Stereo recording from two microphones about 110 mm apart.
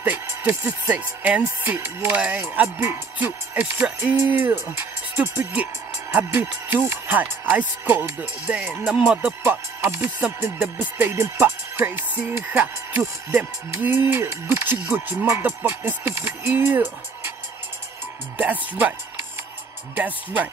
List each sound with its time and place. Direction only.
0.0 s speech: 15° right (ahead or behind)
9.4 s speech: 20° right (ahead or behind)
18.4 s speech: 15° right (ahead or behind)
20.0 s speech: 15° right (ahead or behind)